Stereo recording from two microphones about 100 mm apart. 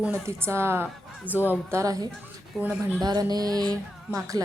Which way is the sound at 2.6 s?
15° right (ahead or behind).